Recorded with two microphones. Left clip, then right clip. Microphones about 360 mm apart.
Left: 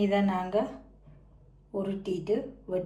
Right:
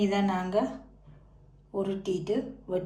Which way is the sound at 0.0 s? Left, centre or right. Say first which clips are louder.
Left 1 dB; centre.